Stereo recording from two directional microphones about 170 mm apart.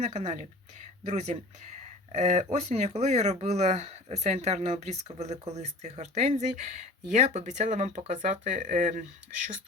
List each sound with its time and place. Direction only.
0.0 s speech: 40° right (ahead or behind)